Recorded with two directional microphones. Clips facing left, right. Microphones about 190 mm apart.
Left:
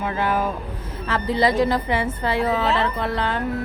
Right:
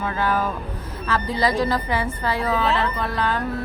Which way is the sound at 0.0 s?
20° left (ahead or behind).